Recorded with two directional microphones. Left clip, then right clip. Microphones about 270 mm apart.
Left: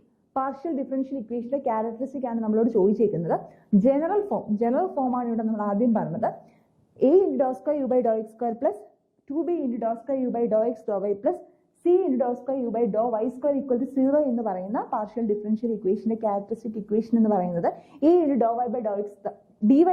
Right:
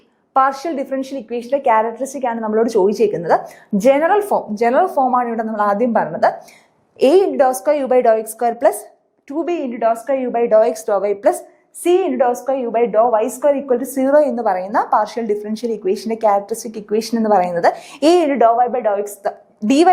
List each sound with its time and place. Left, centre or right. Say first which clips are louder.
0.3 s a woman's voice: right 12 dB; centre
19.5 s a woman's voice: right 6 dB; centre